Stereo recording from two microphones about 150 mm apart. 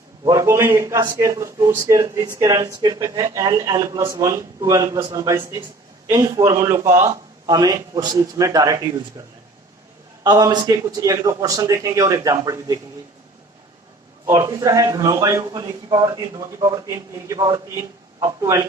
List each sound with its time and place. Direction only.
0.3 s speech: 20° right (ahead or behind)
14.3 s speech: 20° right (ahead or behind)